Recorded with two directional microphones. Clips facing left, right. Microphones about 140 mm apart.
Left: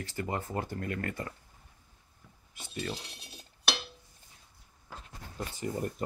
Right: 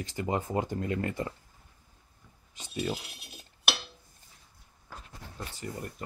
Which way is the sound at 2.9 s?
10° right (ahead or behind).